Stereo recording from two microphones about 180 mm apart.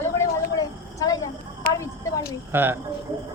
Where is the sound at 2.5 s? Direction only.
10° right (ahead or behind).